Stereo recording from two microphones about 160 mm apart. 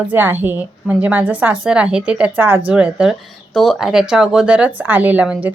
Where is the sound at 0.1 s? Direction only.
10° right (ahead or behind).